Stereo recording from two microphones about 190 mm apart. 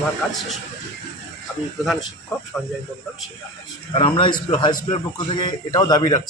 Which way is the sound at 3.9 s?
30° left (ahead or behind).